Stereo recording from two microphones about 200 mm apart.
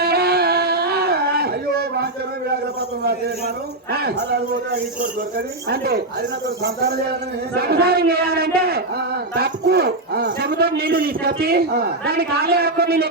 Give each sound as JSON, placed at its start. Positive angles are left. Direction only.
{"t": 0.0, "sound": "a sound", "side_deg": -50}
{"t": 3.9, "sound": "a man's voice", "side_deg": -50}
{"t": 5.7, "sound": "a man's voice", "side_deg": -50}
{"t": 7.5, "sound": "a man's voice", "side_deg": -50}